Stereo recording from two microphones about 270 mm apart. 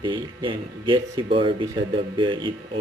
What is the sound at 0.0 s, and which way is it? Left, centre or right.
A woman's voice, centre.